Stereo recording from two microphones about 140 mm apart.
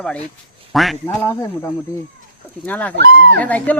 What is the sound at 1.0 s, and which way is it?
Speech, 20° left (ahead or behind).